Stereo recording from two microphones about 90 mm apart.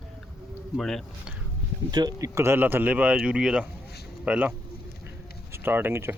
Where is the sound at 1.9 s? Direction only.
50° right (ahead or behind).